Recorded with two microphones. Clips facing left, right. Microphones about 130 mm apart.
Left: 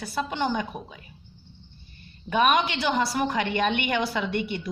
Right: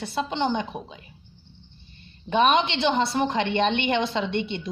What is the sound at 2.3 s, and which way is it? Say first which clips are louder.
A woman's voice: right 2 dB; 25° right (ahead or behind).